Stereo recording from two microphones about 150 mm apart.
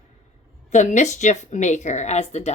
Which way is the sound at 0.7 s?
55° left (ahead or behind).